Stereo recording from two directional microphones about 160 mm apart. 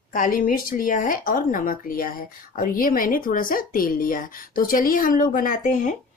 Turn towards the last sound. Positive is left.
turn(degrees=55)  # may be behind; listen again after turning